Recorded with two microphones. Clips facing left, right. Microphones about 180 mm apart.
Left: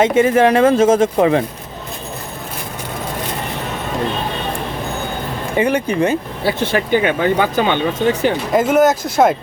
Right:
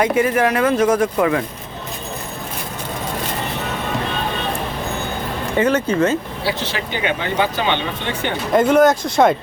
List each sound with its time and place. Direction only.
0.0 s speech: 25° left (ahead or behind)
5.5 s speech: 15° left (ahead or behind)
6.4 s speech: 50° left (ahead or behind)
8.5 s speech: 5° left (ahead or behind)